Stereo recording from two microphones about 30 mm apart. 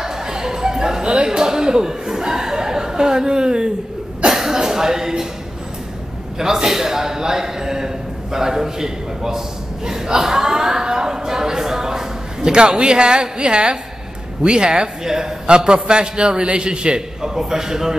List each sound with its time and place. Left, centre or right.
0.0 s music: centre
1.0 s speech: right
4.3 s cough: centre
6.3 s a man's voice: centre
9.8 s a sound: centre
12.7 s a man's voice: right
17.2 s a man's voice: centre